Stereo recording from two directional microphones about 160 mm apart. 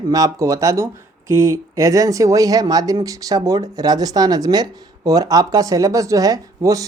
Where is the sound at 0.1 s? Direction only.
20° right (ahead or behind).